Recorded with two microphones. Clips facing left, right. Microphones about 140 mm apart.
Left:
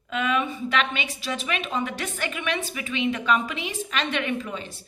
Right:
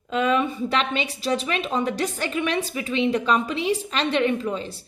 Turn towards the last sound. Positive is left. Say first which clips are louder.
# right 4 dB
turn(degrees=-35)  # may be behind; listen again after turning